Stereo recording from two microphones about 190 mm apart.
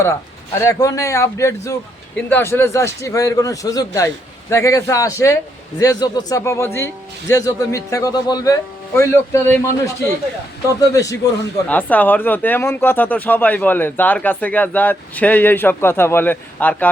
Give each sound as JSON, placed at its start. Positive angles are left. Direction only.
{"t": 0.6, "sound": "speech", "side_deg": 15}